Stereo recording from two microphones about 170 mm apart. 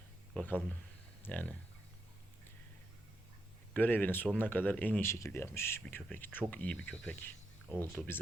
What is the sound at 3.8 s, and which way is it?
Speech, 10° left (ahead or behind).